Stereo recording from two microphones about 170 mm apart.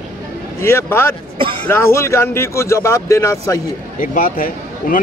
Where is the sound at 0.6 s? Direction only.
15° left (ahead or behind).